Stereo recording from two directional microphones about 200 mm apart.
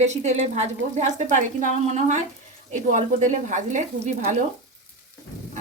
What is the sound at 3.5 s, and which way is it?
Speech, 35° right (ahead or behind).